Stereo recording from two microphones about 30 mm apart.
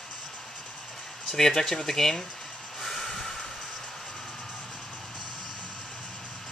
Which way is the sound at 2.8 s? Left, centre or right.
Centre.